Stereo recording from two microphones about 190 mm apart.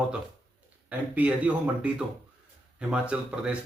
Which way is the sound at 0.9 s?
10° right (ahead or behind).